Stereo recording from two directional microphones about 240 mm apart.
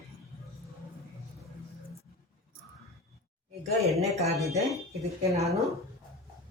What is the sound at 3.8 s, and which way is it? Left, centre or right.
Speech, right.